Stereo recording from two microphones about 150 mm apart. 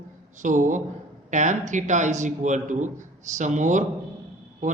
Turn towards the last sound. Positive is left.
turn(degrees=-55)  # may be behind; listen again after turning